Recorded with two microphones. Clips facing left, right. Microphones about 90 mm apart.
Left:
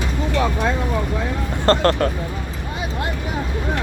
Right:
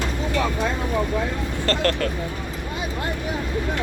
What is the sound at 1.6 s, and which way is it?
Speech, 30° left (ahead or behind).